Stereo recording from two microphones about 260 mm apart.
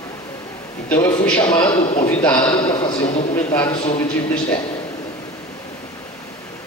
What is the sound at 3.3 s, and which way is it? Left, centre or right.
Speech, centre.